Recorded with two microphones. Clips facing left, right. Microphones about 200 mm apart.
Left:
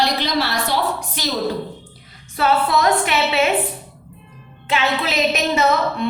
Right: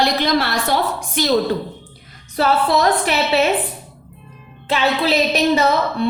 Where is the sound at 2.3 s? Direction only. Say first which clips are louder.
Right 1 dB; 35° right (ahead or behind).